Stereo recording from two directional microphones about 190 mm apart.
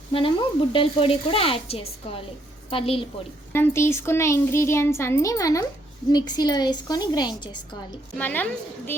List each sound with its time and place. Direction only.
0.1 s a woman's voice: 25° left (ahead or behind)
3.5 s a child's voice: 15° left (ahead or behind)
8.2 s a child's voice: 10° left (ahead or behind)